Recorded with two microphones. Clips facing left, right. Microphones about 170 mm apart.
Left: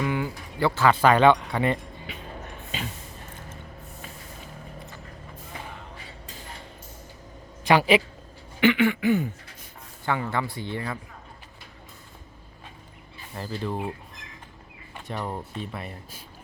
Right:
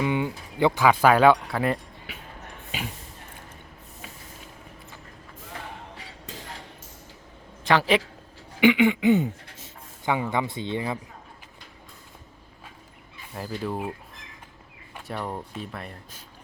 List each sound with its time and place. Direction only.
0.0 s speech: 20° right (ahead or behind)
7.6 s a man's voice: 10° left (ahead or behind)
8.6 s a sound: 15° right (ahead or behind)
10.1 s speech: 15° right (ahead or behind)
13.3 s speech: 5° right (ahead or behind)
14.9 s speech: centre (ahead or behind)